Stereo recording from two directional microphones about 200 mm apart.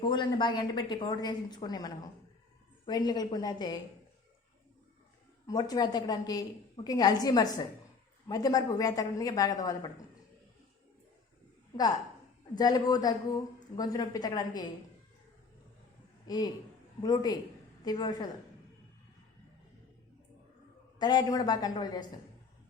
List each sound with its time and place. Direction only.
0.0 s a woman's voice: 20° left (ahead or behind)
5.5 s a woman's voice: 20° left (ahead or behind)
12.5 s a woman's voice: 20° left (ahead or behind)
16.2 s a man's voice: 20° left (ahead or behind)
21.0 s a woman's voice: 20° left (ahead or behind)